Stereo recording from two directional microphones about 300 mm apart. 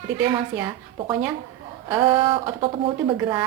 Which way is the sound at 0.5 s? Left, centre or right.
Centre.